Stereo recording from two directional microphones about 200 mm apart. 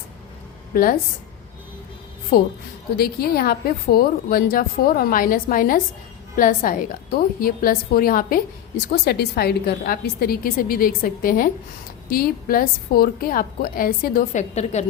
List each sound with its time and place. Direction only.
0.7 s a woman's voice: 45° left (ahead or behind)
2.3 s a woman's voice: 50° left (ahead or behind)